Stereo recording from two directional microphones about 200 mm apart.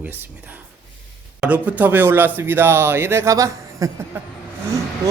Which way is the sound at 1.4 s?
5° right (ahead or behind).